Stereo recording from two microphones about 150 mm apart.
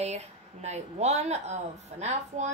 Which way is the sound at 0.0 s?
45° right (ahead or behind).